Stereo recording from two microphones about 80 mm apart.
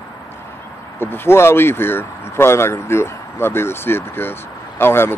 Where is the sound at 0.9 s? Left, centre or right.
Left.